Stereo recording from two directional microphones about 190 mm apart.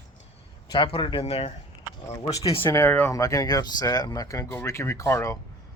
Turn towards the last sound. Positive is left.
turn(degrees=15)  # may be behind; listen again after turning